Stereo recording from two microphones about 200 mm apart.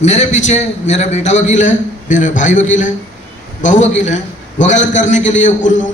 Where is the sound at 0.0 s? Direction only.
35° left (ahead or behind).